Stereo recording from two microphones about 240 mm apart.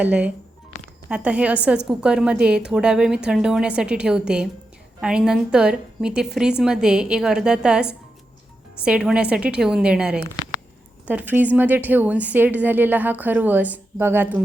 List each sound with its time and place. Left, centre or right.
0.0 s a woman's voice: centre
0.7 s music: left
1.1 s a woman's voice: centre